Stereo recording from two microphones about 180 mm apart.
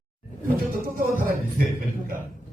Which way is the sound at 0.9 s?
50° right (ahead or behind).